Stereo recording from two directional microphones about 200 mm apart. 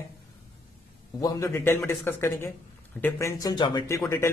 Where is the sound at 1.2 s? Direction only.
15° left (ahead or behind).